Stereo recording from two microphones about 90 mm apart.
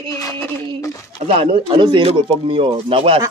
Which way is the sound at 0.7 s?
35° left (ahead or behind).